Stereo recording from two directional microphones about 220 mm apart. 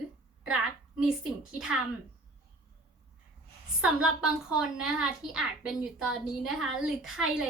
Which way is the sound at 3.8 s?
75° right (ahead or behind).